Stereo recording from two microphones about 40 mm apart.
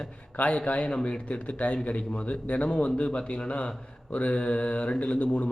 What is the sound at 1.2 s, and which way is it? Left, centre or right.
Speech, left.